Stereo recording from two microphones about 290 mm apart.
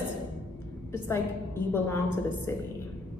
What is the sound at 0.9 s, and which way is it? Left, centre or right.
A woman's voice, centre.